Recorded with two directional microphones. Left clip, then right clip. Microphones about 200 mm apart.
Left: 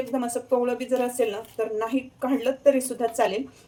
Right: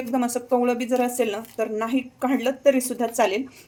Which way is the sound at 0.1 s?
40° right (ahead or behind).